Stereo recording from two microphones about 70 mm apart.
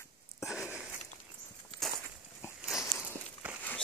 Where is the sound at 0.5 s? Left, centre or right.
Centre.